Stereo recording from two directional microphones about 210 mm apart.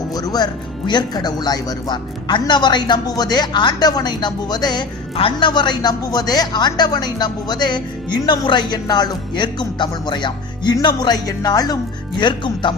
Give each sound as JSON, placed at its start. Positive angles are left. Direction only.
{"t": 0.1, "sound": "speech", "side_deg": 20}